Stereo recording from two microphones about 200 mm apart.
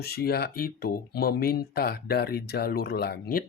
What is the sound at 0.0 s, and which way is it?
Speech, 50° left (ahead or behind).